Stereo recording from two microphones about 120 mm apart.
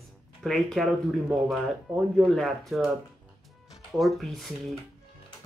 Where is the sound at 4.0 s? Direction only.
Centre (ahead or behind).